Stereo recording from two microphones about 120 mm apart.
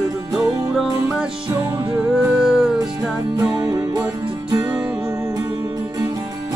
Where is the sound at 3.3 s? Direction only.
30° right (ahead or behind).